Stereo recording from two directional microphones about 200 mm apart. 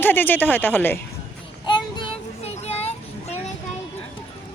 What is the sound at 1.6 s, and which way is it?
Child singing, 25° left (ahead or behind).